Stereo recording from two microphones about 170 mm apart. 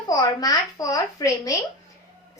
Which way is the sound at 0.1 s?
20° left (ahead or behind).